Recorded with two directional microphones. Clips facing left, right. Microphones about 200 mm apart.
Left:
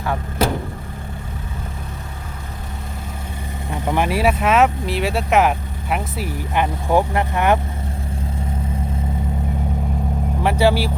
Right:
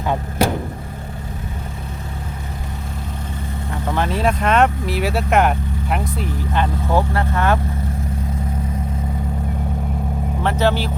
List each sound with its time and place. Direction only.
3.7 s speech: 15° left (ahead or behind)
6.5 s speech: 15° left (ahead or behind)
10.4 s speech: 10° left (ahead or behind)